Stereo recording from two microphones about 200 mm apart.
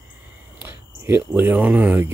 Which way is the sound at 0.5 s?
10° right (ahead or behind).